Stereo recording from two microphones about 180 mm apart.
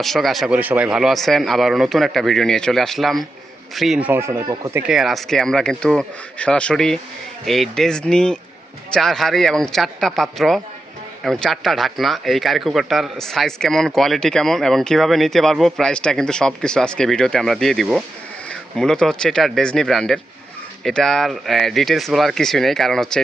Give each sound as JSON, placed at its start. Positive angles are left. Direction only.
{"t": 0.0, "sound": "speech", "side_deg": 0}
{"t": 4.1, "sound": "speech", "side_deg": -15}
{"t": 4.8, "sound": "speech", "side_deg": 0}